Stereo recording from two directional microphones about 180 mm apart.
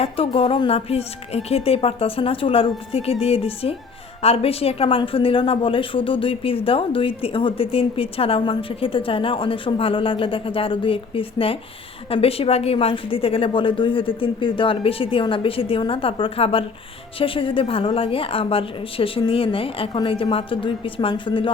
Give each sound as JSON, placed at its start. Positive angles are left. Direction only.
{"t": 0.0, "sound": "a woman's voice", "side_deg": 30}